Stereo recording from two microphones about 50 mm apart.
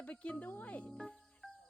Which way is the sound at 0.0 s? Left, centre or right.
Left.